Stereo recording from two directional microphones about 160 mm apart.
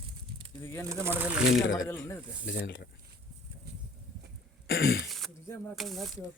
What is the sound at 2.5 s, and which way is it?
Speech, 90° left.